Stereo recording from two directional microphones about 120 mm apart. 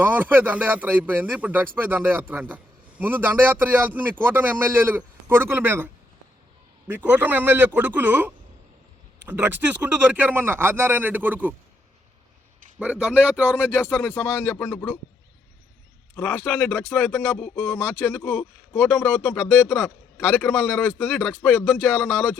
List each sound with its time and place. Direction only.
0.0 s a man's voice: 15° right (ahead or behind)
12.8 s a man's voice: 10° right (ahead or behind)
13.9 s speech: 15° left (ahead or behind)
16.1 s speech: 15° left (ahead or behind)